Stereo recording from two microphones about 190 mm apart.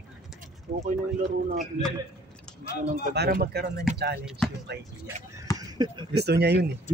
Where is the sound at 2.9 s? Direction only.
55° right (ahead or behind).